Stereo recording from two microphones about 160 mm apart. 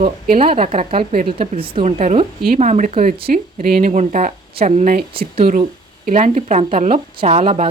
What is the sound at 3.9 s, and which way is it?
Speech, 45° right (ahead or behind).